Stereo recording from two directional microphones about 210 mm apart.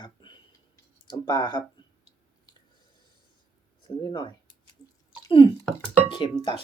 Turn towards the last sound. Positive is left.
turn(degrees=25)  # may be behind; listen again after turning